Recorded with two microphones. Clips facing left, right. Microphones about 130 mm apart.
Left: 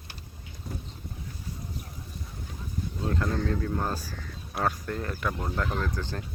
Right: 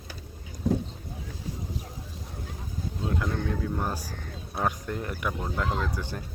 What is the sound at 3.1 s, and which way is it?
Speech, 15° right (ahead or behind).